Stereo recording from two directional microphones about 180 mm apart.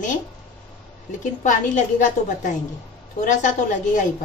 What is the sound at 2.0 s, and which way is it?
A woman's voice, 45° left (ahead or behind).